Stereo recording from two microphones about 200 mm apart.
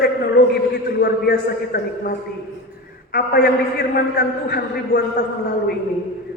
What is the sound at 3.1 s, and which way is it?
A man's voice, 50° left (ahead or behind).